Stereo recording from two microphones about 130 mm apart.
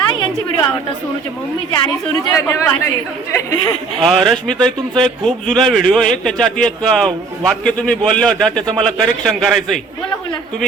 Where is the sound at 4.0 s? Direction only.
5° left (ahead or behind).